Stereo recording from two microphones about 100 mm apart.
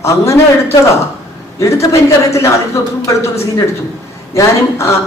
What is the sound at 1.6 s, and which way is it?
A woman's voice, 30° left (ahead or behind).